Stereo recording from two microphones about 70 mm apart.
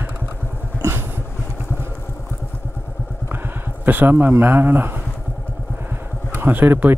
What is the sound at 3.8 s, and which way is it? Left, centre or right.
Speech, right.